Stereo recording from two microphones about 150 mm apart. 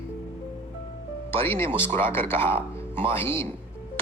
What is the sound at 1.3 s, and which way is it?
Speech, 15° left (ahead or behind).